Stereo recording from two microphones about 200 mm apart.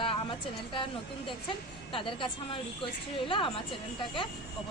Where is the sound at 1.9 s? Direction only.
25° left (ahead or behind).